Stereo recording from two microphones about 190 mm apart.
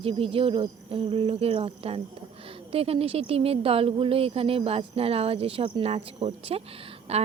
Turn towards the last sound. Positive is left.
turn(degrees=-35)  # may be behind; listen again after turning